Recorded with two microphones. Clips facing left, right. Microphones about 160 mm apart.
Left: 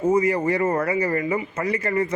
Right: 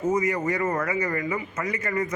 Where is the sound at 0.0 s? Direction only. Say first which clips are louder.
Left 4 dB; 30° left (ahead or behind).